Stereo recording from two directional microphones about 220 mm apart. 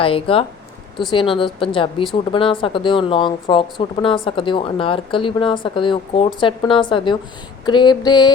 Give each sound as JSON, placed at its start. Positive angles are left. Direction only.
{"t": 0.0, "sound": "speech", "side_deg": 25}